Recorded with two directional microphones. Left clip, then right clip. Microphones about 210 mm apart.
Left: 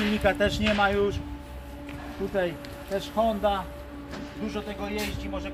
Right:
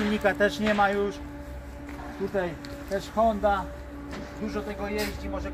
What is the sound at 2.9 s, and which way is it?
Speech, centre (ahead or behind).